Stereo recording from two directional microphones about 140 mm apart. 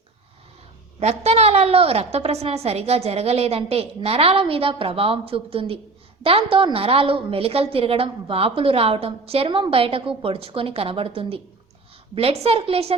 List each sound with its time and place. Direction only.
0.9 s a woman's voice: 50° right (ahead or behind)